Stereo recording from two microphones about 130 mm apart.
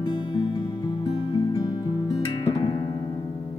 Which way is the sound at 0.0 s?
40° left (ahead or behind).